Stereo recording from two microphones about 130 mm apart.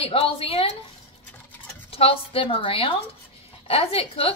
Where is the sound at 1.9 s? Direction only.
45° left (ahead or behind).